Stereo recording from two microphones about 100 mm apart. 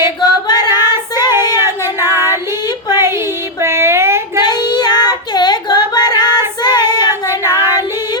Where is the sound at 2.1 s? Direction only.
25° right (ahead or behind).